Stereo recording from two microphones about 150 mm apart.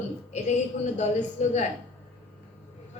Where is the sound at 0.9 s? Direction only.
50° left (ahead or behind).